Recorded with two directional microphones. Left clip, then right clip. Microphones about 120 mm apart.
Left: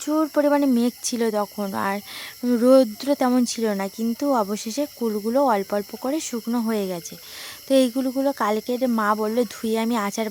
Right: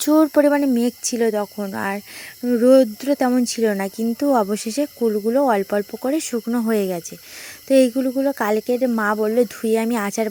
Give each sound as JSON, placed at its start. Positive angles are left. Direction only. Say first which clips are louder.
{"t": 0.0, "sound": "speech", "louder": "right 6 dB", "side_deg": -35}
{"t": 0.4, "sound": "speech", "louder": "right 2 dB", "side_deg": -10}
{"t": 4.9, "sound": "speech", "louder": "right 3 dB", "side_deg": -10}